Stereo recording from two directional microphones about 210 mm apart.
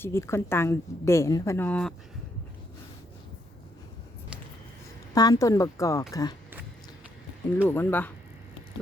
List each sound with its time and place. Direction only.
0.0 s a woman's voice: 10° left (ahead or behind)
5.1 s a woman's voice: 15° left (ahead or behind)
7.7 s a woman's voice: 10° left (ahead or behind)